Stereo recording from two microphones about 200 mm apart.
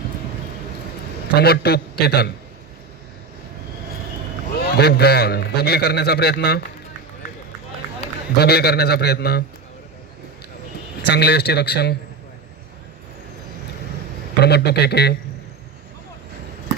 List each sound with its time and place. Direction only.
1.4 s speech: 55° left (ahead or behind)
4.6 s speech: 55° left (ahead or behind)
8.0 s run: 35° left (ahead or behind)
8.4 s speech: 55° left (ahead or behind)
11.0 s a man's voice: 55° left (ahead or behind)
14.3 s a man's voice: 55° left (ahead or behind)